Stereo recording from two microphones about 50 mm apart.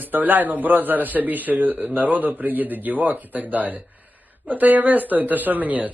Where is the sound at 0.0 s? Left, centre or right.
Right.